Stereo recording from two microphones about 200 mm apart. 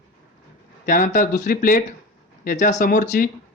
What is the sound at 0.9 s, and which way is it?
Speech, 40° left (ahead or behind).